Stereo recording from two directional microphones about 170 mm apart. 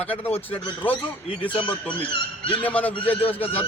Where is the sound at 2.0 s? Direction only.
30° left (ahead or behind).